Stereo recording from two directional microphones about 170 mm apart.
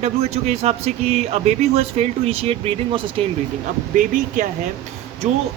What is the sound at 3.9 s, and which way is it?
A man's voice, 55° right (ahead or behind).